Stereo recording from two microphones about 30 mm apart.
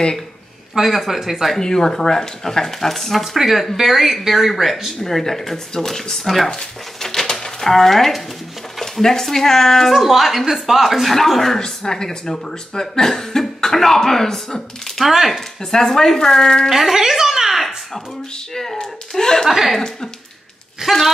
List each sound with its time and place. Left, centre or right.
0.7 s speech: centre
1.6 s speech: centre
5.0 s speech: centre
6.2 s speech: centre
6.5 s dog: centre
7.6 s speech: centre
9.2 s speech: centre
9.8 s speech: centre
11.5 s speech: centre
16.6 s speech: centre
16.9 s a sound: centre
18.5 s speech: centre
19.4 s speech: centre
20.8 s speech: centre